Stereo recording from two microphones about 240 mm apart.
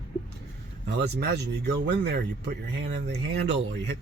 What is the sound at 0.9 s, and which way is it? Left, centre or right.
A man's voice, right.